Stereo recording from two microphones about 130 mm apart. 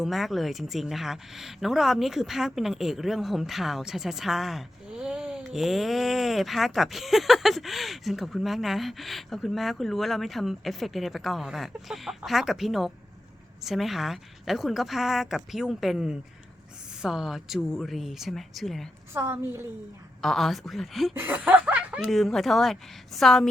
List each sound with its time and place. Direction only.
0.0 s a woman's voice: centre (ahead or behind)
19.1 s a woman's voice: 20° right (ahead or behind)
20.2 s a woman's voice: centre (ahead or behind)
21.2 s chuckle: 15° right (ahead or behind)
22.1 s a woman's voice: centre (ahead or behind)